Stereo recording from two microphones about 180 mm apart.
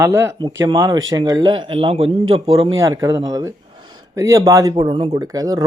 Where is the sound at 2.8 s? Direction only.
20° right (ahead or behind).